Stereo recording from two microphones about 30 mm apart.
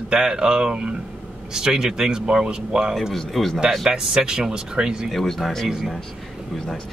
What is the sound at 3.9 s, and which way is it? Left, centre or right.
Speech, right.